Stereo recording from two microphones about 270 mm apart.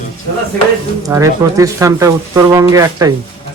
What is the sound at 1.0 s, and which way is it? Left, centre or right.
Speech, centre.